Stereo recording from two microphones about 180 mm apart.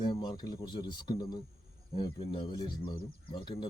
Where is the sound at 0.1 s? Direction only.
25° left (ahead or behind).